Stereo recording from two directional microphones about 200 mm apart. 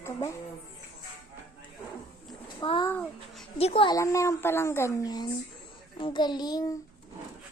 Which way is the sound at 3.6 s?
30° left (ahead or behind).